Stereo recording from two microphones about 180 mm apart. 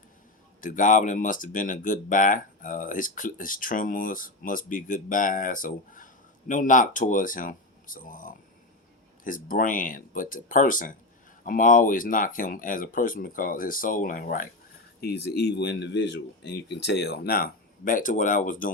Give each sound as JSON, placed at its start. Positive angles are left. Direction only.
{"t": 0.6, "sound": "speech", "side_deg": 45}
{"t": 15.0, "sound": "speech", "side_deg": 65}